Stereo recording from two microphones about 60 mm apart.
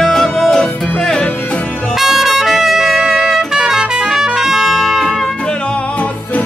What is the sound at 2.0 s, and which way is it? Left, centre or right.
Music, centre.